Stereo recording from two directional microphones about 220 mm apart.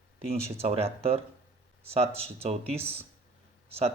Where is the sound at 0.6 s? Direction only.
25° right (ahead or behind).